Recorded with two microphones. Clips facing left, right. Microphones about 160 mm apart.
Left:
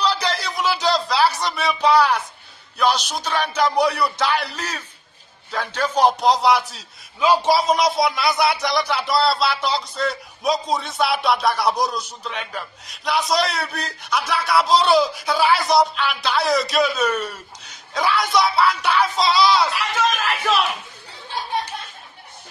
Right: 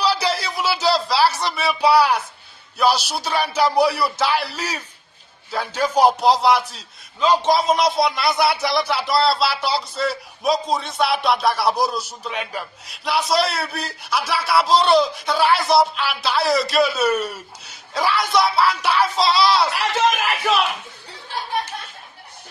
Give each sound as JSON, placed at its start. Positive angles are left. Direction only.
{"t": 0.0, "sound": "a sound", "side_deg": -10}
{"t": 2.8, "sound": "a man's voice", "side_deg": -10}
{"t": 20.1, "sound": "speech", "side_deg": -15}